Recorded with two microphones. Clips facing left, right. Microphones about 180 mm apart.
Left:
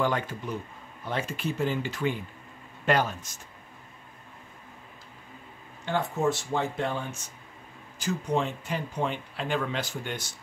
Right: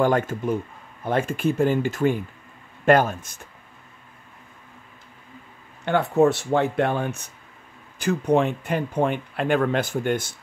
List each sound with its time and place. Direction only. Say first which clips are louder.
0.0 s speech: right 7 dB; 50° right (ahead or behind)
5.9 s speech: right 8 dB; 65° right (ahead or behind)